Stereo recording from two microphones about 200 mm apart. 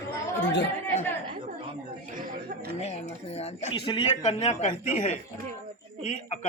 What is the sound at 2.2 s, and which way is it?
Speech, 45° right (ahead or behind).